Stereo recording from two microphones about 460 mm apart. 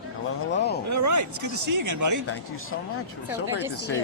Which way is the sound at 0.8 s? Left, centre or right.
Right.